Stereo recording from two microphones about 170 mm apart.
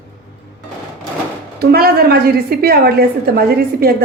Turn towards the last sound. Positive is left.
turn(degrees=-65)  # may be behind; listen again after turning